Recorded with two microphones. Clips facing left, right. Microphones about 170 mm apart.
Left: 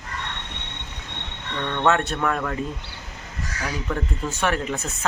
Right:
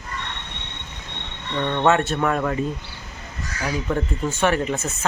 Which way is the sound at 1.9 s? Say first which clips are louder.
Right 2 dB; 5° right (ahead or behind).